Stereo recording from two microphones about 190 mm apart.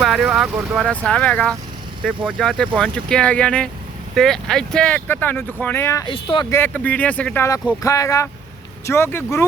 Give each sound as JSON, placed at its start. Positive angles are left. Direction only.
{"t": 0.0, "sound": "speech", "side_deg": 0}
{"t": 6.5, "sound": "speech", "side_deg": 10}